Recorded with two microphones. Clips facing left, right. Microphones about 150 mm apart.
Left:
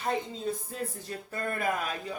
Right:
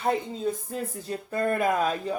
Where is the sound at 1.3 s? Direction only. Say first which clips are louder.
Right 7 dB; 45° right (ahead or behind).